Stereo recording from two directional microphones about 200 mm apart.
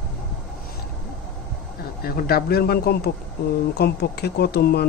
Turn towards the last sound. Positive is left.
turn(degrees=55)  # may be behind; listen again after turning